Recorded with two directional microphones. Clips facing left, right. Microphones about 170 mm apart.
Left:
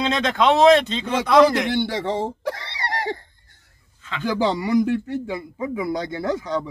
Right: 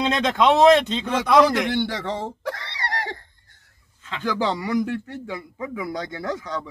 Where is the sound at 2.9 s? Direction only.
10° left (ahead or behind).